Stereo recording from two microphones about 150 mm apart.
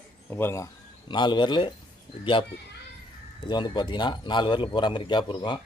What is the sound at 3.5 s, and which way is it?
A man's voice, 30° left (ahead or behind).